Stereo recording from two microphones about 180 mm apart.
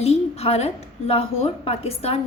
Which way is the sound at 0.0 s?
35° left (ahead or behind).